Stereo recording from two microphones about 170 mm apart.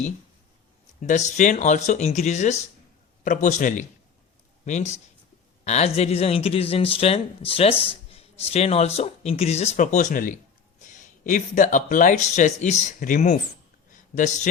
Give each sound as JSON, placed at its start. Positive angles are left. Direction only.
{"t": 1.0, "sound": "speech", "side_deg": 45}